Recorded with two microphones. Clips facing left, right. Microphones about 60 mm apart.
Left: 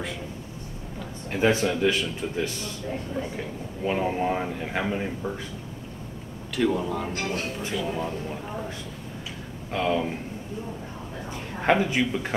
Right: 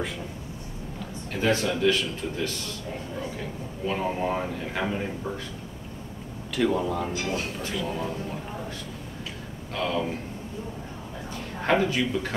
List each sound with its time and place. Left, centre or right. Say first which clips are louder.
1.3 s a man's voice: left 2 dB; centre
3.8 s a man's voice: left 2 dB; centre
6.5 s a man's voice: even; centre
9.7 s speech: left 3 dB; centre
11.6 s a man's voice: left 1 dB; centre